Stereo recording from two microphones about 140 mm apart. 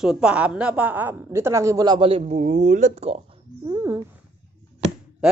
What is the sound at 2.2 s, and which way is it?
Speech, 65° right (ahead or behind).